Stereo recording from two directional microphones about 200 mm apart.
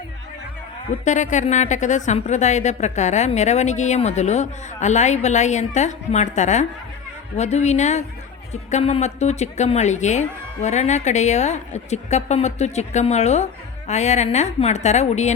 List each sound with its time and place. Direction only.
0.9 s speech: 35° left (ahead or behind)